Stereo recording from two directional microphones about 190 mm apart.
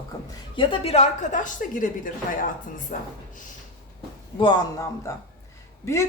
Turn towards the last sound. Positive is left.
turn(degrees=15)  # may be behind; listen again after turning